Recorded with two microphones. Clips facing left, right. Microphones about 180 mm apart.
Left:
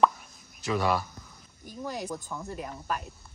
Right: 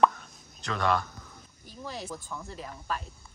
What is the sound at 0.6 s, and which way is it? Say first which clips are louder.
Speech: left 1 dB; 5° left (ahead or behind).